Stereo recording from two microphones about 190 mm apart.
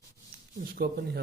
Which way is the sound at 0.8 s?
50° right (ahead or behind).